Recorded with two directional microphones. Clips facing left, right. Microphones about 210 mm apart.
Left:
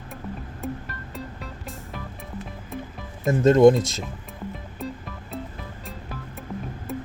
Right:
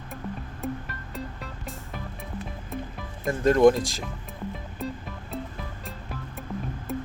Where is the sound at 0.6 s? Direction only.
Centre (ahead or behind).